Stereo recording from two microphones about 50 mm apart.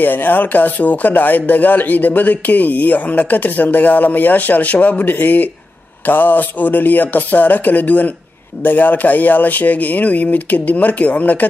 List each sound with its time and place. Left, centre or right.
0.0 s speech: left